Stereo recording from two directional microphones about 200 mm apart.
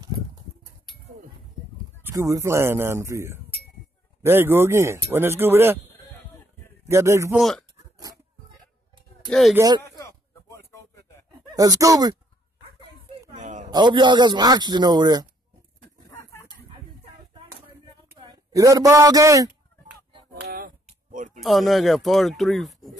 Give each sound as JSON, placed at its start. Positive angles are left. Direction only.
{"t": 2.0, "sound": "speech", "side_deg": -15}
{"t": 6.9, "sound": "speech", "side_deg": -15}
{"t": 7.3, "sound": "speech", "side_deg": 0}
{"t": 9.3, "sound": "speech", "side_deg": 0}
{"t": 9.6, "sound": "speech", "side_deg": -20}
{"t": 9.8, "sound": "a sound", "side_deg": 15}
{"t": 11.5, "sound": "speech", "side_deg": -15}
{"t": 13.3, "sound": "a sound", "side_deg": -40}
{"t": 13.7, "sound": "speech", "side_deg": -20}
{"t": 16.1, "sound": "chicken", "side_deg": 15}
{"t": 18.1, "sound": "a sound", "side_deg": -20}
{"t": 20.4, "sound": "a sound", "side_deg": -50}
{"t": 21.4, "sound": "speech", "side_deg": 0}